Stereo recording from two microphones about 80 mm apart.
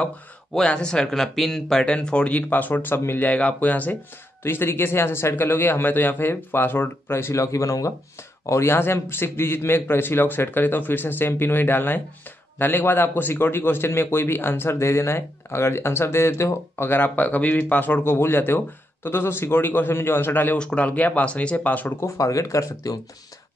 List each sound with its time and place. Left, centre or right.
0.6 s a man's voice: centre; by 7.9 s left
8.5 s a man's voice: left
20.5 s speech: centre
22.0 s speech: left